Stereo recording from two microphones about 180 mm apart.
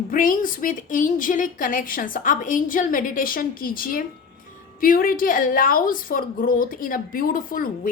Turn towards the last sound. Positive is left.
turn(degrees=50)  # may be behind; listen again after turning